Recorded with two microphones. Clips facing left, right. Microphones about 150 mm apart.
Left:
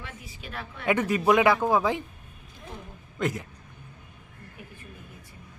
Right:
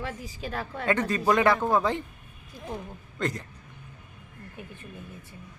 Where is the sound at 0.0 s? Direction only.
35° right (ahead or behind).